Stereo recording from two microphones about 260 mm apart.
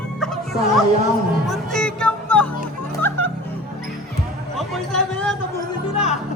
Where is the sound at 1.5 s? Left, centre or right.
Centre.